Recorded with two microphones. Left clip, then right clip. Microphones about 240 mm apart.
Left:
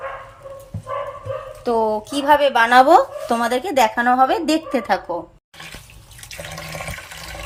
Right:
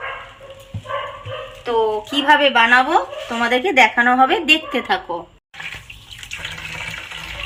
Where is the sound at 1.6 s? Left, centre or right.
Left.